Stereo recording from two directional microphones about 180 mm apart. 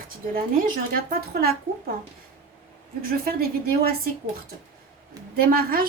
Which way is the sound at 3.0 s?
50° right (ahead or behind).